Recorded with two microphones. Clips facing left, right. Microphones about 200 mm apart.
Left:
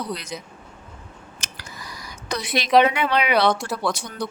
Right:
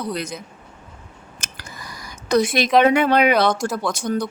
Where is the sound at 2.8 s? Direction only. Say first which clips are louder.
Right 6 dB; 45° right (ahead or behind).